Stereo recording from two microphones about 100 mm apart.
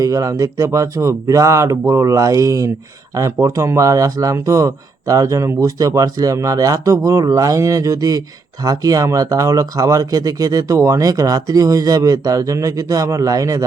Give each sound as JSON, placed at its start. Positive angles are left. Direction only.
{"t": 0.0, "sound": "speech", "side_deg": -35}